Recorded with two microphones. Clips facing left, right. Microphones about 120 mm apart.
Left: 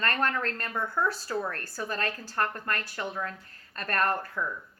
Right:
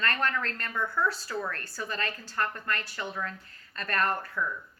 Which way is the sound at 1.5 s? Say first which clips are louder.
Left 2 dB; 45° left (ahead or behind).